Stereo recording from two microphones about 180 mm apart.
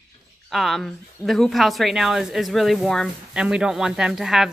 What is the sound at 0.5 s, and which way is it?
A woman's voice, centre (ahead or behind).